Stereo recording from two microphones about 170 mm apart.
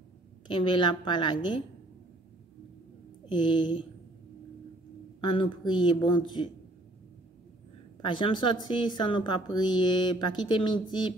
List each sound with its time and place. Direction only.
0.5 s speech: 30° left (ahead or behind)
3.3 s speech: 25° left (ahead or behind)
5.2 s speech: 30° left (ahead or behind)
8.0 s speech: 30° left (ahead or behind)